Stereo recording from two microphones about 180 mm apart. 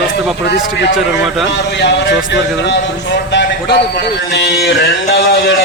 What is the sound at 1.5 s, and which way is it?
A man's voice, 70° left (ahead or behind).